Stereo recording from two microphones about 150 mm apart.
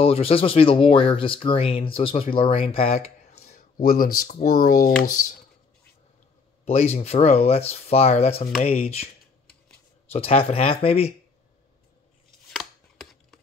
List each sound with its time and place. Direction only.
0.0 s speech: 40° left (ahead or behind)
3.8 s speech: 75° left (ahead or behind)
6.6 s speech: 45° left (ahead or behind)
10.1 s speech: 40° left (ahead or behind)
12.5 s chopping: centre (ahead or behind)